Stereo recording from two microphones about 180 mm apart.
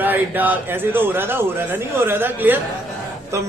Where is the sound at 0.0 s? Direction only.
10° right (ahead or behind).